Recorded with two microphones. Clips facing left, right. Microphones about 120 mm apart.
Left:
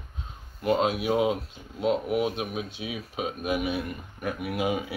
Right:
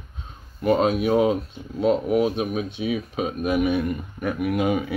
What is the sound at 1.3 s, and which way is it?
Speech, 5° left (ahead or behind).